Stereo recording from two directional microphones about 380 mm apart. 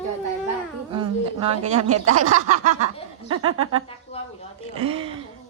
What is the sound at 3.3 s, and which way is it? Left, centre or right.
Speech, right.